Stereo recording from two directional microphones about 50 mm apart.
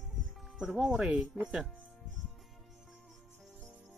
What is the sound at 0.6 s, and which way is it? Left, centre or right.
Speech, centre.